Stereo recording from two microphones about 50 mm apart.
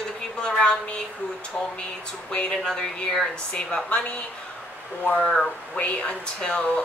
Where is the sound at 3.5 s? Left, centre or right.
Centre.